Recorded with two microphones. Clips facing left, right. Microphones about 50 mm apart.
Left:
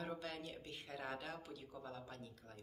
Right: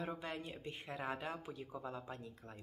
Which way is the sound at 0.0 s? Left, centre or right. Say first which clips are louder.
Right 3 dB; right.